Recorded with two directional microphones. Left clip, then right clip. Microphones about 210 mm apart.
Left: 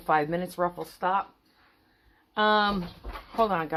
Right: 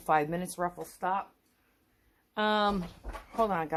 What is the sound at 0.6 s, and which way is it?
Speech, 5° left (ahead or behind).